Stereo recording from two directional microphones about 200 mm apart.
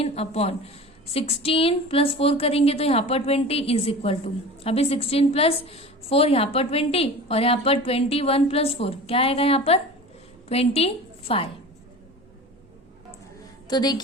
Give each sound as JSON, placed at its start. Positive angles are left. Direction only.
{"t": 0.0, "sound": "a woman's voice", "side_deg": 30}
{"t": 13.7, "sound": "a woman's voice", "side_deg": 20}